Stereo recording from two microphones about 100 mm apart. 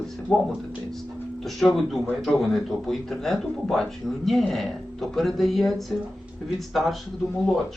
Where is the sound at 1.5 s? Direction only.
Centre (ahead or behind).